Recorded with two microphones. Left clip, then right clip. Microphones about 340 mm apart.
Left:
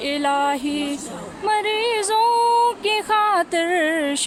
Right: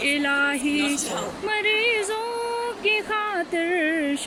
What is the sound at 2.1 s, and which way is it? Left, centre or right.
Music, left.